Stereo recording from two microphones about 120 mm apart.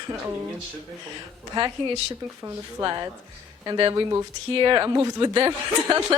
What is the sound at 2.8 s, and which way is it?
Speech, 40° right (ahead or behind).